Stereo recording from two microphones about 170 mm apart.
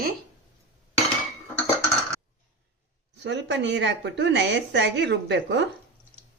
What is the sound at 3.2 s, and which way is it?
A woman's voice, 90° right.